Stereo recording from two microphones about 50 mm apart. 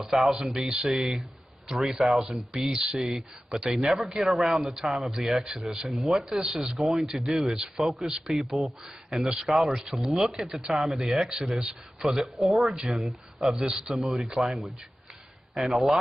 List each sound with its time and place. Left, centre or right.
0.0 s speech: centre